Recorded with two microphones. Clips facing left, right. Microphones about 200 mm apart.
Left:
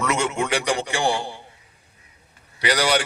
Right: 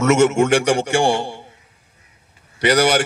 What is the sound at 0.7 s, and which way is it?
Speech, 65° right (ahead or behind).